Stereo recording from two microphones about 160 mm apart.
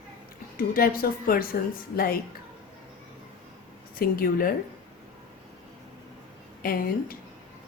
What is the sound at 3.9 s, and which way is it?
Speech, 65° left (ahead or behind).